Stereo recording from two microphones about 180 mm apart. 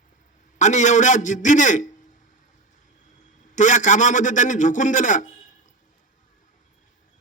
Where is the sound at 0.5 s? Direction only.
40° left (ahead or behind).